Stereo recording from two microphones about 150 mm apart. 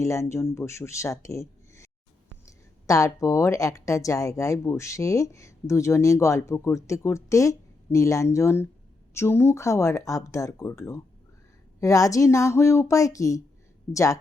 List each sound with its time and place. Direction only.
0.0 s speech: 20° left (ahead or behind)